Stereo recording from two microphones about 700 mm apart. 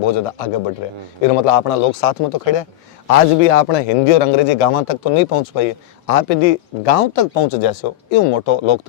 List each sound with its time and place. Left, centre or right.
0.0 s a man's voice: left